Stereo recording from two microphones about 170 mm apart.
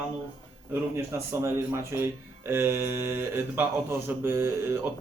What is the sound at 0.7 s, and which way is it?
Speech, 15° right (ahead or behind).